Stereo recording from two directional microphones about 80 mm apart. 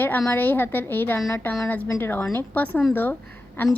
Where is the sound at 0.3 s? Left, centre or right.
Left.